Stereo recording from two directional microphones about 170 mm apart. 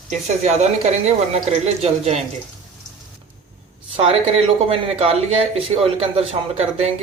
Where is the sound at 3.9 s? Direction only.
35° right (ahead or behind).